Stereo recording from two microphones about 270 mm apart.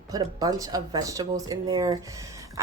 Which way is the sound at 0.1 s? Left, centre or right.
Centre.